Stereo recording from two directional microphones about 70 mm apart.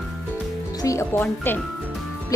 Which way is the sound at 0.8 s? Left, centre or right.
Left.